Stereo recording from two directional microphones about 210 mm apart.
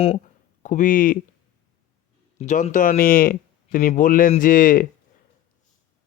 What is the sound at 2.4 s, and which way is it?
Speech, 35° left (ahead or behind).